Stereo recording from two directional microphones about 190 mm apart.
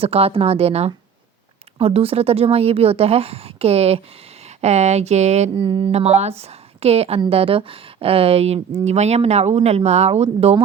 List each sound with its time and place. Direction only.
0.0 s speech: 30° right (ahead or behind)